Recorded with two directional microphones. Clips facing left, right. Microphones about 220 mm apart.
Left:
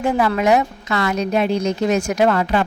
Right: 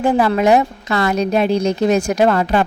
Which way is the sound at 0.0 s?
35° right (ahead or behind).